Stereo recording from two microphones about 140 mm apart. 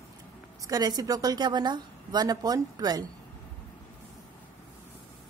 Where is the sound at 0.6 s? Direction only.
25° right (ahead or behind).